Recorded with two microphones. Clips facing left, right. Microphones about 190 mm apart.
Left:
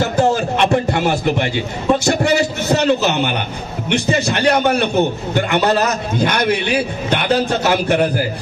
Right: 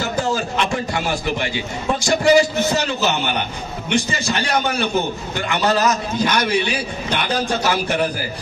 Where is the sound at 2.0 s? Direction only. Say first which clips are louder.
Right 1 dB; 60° left (ahead or behind).